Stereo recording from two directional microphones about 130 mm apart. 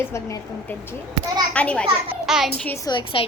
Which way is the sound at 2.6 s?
20° left (ahead or behind).